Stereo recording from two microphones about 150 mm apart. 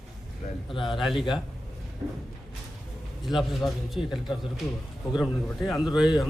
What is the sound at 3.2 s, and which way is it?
A man's voice, centre (ahead or behind).